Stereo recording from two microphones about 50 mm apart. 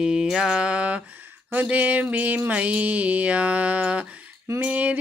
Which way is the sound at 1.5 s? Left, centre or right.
Right.